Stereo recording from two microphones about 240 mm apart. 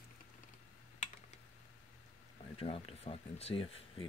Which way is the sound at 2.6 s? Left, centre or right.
Left.